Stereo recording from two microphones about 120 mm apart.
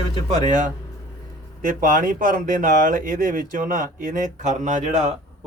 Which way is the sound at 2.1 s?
90° right.